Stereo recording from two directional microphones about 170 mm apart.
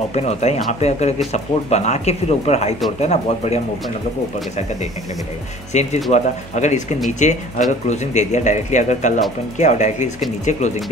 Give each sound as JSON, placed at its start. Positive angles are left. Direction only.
{"t": 0.1, "sound": "speech", "side_deg": 40}
{"t": 5.7, "sound": "speech", "side_deg": 40}